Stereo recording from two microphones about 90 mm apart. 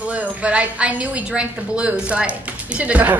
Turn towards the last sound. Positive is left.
turn(degrees=-15)  # may be behind; listen again after turning